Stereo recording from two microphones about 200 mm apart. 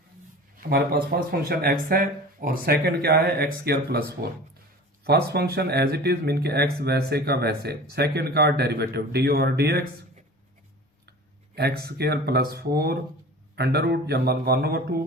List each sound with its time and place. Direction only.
0.5 s speech: 50° right (ahead or behind)
11.5 s speech: 50° right (ahead or behind)